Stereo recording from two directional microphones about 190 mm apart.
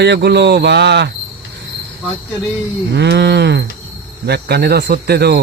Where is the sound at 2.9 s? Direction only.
65° right (ahead or behind).